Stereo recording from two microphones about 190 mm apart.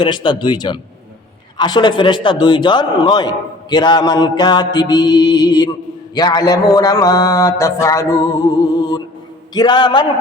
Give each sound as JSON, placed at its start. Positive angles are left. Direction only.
{"t": 0.0, "sound": "a man's voice", "side_deg": 25}